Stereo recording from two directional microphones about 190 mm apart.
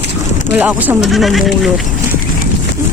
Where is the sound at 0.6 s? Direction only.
5° right (ahead or behind).